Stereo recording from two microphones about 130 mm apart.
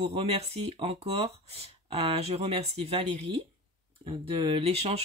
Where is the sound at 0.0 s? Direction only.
50° right (ahead or behind).